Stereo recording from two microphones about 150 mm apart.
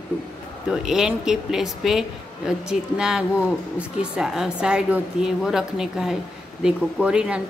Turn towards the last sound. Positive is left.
turn(degrees=-5)  # may be behind; listen again after turning